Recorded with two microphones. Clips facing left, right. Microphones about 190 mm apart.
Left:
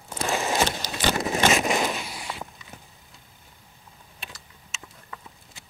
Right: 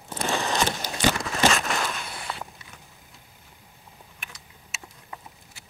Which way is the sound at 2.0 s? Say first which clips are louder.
Left 1 dB; centre (ahead or behind).